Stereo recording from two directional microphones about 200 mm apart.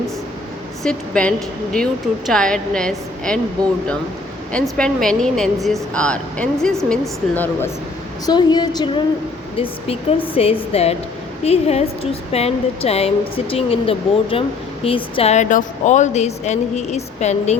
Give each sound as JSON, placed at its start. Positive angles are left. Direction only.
{"t": 0.8, "sound": "speech", "side_deg": 5}
{"t": 4.5, "sound": "speech", "side_deg": 5}
{"t": 8.3, "sound": "a woman's voice", "side_deg": 20}